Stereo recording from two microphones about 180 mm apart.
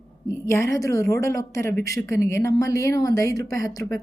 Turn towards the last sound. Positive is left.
turn(degrees=20)  # may be behind; listen again after turning